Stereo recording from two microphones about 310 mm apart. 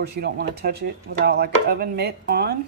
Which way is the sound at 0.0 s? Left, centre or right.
Right.